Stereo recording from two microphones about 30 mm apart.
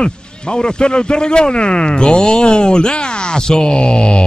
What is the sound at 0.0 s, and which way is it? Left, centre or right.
Speech, left.